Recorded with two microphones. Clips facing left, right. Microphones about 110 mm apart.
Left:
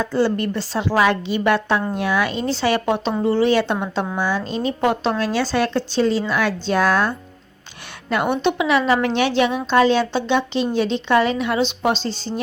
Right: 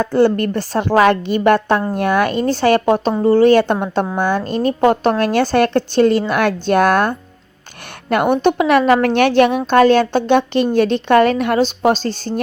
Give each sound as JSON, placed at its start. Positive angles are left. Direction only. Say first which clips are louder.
{"t": 0.0, "sound": "speech", "louder": "right 5 dB", "side_deg": -55}